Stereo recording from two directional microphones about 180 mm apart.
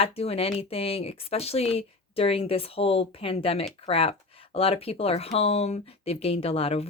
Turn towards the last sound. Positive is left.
turn(degrees=30)  # may be behind; listen again after turning